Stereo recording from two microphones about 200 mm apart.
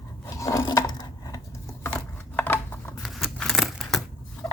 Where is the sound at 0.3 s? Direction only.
15° left (ahead or behind).